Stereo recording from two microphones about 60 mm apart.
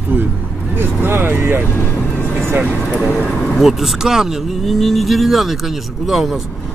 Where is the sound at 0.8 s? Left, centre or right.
Right.